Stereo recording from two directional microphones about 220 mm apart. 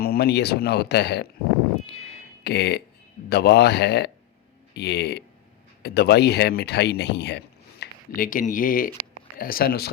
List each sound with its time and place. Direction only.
0.0 s speech: 45° left (ahead or behind)
2.4 s speech: 50° left (ahead or behind)